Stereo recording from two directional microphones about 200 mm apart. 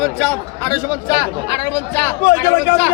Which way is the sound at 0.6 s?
20° left (ahead or behind).